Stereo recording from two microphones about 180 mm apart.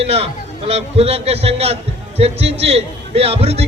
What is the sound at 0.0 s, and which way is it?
A man's voice, 35° right (ahead or behind).